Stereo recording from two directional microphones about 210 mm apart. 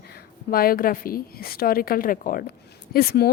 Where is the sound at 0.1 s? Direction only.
45° left (ahead or behind).